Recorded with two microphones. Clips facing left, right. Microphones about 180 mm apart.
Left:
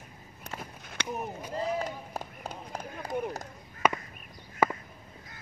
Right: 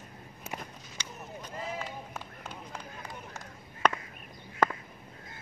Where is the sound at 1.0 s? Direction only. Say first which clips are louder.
Left 12 dB; 60° left (ahead or behind).